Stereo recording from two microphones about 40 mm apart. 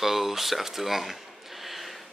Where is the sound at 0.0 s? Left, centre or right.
Centre.